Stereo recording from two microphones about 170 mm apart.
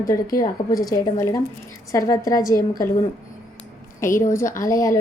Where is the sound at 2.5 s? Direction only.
55° left (ahead or behind).